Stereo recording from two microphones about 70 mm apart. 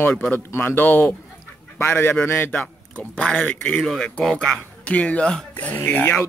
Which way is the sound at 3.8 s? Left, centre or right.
Centre.